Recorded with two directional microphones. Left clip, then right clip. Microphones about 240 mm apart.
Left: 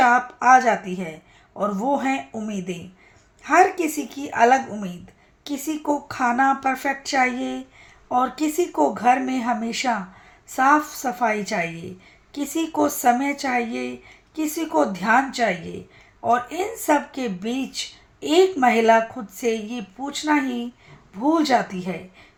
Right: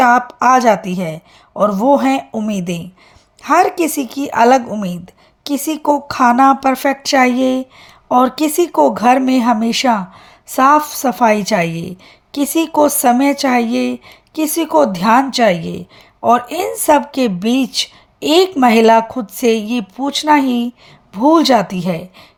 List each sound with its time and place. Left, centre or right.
0.0 s speech: right